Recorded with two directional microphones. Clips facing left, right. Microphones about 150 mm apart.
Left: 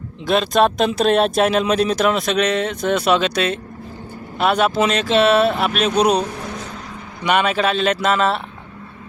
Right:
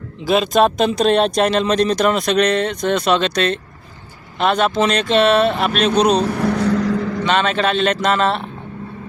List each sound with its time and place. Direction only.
0.3 s speech: centre (ahead or behind)
6.3 s vehicle: 70° right (ahead or behind); by 7.3 s 90° right
7.3 s speech: 10° left (ahead or behind)